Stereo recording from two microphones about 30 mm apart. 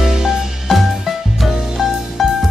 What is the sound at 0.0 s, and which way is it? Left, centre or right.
Music, centre.